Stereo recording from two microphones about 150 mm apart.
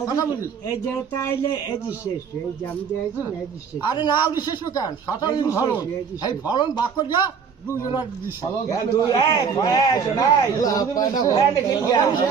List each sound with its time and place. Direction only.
1.1 s speech: 20° left (ahead or behind)
3.8 s speech: 30° left (ahead or behind)
8.7 s speech: 25° left (ahead or behind)